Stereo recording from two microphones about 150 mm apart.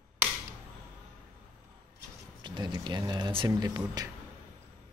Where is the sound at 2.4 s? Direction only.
30° right (ahead or behind).